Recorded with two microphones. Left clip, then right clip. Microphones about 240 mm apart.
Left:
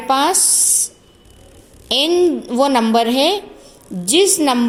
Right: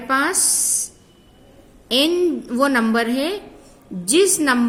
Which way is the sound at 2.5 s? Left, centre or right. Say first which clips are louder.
Left 4 dB; right.